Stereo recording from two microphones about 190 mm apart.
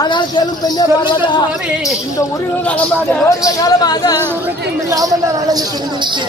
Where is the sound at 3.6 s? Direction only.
20° left (ahead or behind).